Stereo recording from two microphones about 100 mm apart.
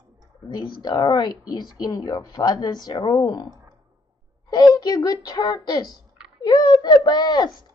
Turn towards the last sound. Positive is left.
turn(degrees=45)  # may be behind; listen again after turning